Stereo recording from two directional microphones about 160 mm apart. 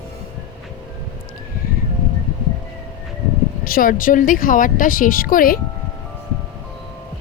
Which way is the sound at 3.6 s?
60° left (ahead or behind).